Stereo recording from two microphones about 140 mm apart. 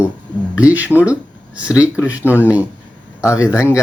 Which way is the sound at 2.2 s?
15° left (ahead or behind).